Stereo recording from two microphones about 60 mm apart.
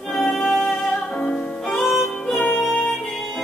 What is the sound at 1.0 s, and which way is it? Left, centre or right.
Music, centre.